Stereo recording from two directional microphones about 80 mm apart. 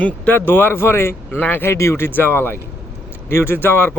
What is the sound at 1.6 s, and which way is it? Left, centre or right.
Speech, left.